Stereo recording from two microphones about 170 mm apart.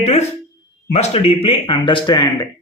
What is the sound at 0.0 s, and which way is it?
A man's voice, 40° left (ahead or behind).